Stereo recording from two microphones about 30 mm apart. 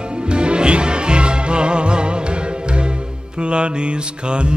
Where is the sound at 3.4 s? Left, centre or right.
Right.